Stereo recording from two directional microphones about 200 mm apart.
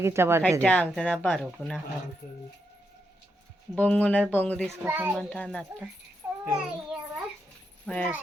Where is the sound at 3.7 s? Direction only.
10° left (ahead or behind).